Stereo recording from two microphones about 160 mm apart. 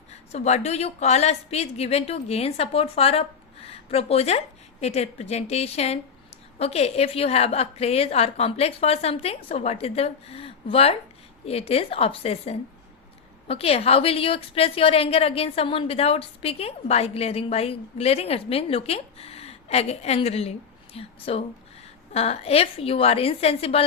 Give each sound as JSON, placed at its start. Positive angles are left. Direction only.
{"t": 0.1, "sound": "a woman's voice", "side_deg": 45}